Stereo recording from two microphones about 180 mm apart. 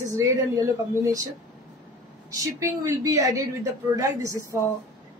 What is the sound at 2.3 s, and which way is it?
A woman's voice, 15° right (ahead or behind).